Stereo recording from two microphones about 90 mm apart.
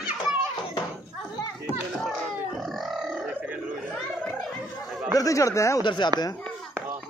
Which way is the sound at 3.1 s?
10° right (ahead or behind).